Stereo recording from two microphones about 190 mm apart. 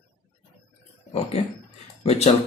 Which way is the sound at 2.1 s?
30° left (ahead or behind).